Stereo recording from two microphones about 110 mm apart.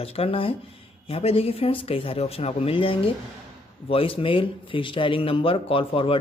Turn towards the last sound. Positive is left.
turn(degrees=55)  # may be behind; listen again after turning